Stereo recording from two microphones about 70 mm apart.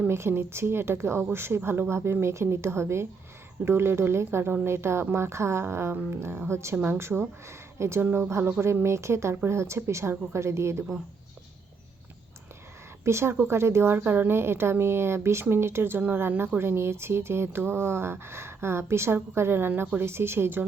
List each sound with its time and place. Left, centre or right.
0.1 s speech: right
13.1 s speech: right